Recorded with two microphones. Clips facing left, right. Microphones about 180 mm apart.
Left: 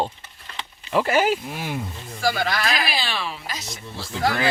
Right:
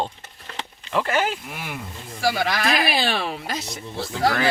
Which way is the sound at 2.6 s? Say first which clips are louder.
Right 4 dB; 55° right (ahead or behind).